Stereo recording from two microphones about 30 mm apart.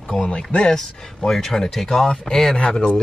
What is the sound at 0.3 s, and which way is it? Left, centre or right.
Speech, left.